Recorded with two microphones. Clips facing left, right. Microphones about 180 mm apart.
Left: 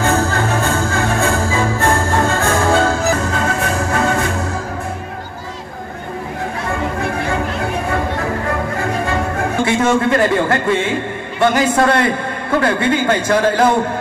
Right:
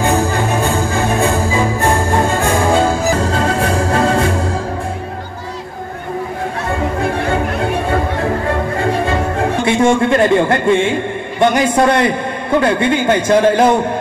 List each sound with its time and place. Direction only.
0.0 s music: 15° right (ahead or behind)
3.2 s music: 30° right (ahead or behind)
7.9 s music: 30° right (ahead or behind)
9.7 s a man's voice: 25° right (ahead or behind)